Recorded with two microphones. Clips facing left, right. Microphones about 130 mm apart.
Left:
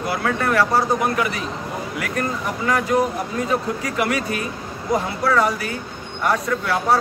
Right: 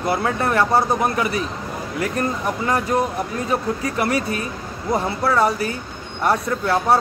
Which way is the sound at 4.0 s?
30° right (ahead or behind).